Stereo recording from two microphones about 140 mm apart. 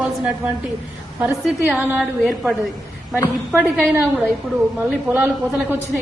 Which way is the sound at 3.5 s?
10° right (ahead or behind).